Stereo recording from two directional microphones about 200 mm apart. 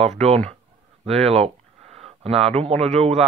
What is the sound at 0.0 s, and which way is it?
Speech, 35° right (ahead or behind).